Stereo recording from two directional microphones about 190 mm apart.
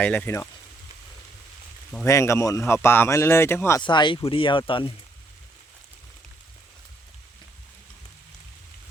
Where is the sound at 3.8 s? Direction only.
25° left (ahead or behind).